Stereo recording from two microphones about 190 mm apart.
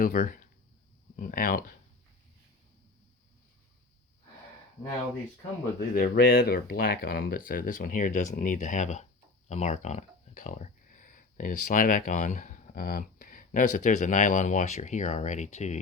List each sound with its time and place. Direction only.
0.0 s speech: 45° left (ahead or behind)
5.9 s speech: 55° left (ahead or behind); by 15.8 s 35° left (ahead or behind)